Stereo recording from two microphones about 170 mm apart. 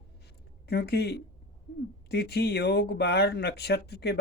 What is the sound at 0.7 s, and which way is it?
Speech, 70° left (ahead or behind).